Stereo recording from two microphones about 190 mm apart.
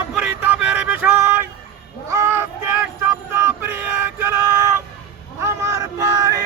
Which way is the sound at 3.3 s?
10° right (ahead or behind).